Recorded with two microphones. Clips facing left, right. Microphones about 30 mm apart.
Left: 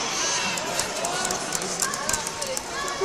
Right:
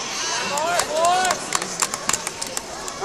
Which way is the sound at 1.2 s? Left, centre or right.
Right.